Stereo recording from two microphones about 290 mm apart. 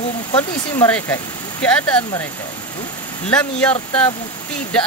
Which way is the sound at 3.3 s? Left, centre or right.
Centre.